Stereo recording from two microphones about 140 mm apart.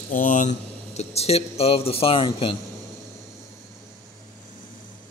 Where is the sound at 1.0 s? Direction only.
50° left (ahead or behind).